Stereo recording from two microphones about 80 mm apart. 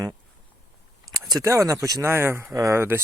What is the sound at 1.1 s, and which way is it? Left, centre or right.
Speech, right.